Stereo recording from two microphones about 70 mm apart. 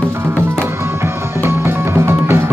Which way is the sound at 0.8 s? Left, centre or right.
Right.